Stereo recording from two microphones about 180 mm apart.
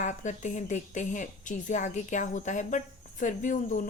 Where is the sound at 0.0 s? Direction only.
45° left (ahead or behind).